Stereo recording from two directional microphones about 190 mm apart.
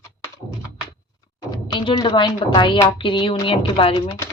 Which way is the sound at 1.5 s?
25° left (ahead or behind).